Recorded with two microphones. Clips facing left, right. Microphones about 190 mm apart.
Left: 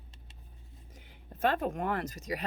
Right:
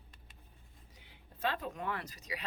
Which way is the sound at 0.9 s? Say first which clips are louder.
Left 8 dB; 50° left (ahead or behind).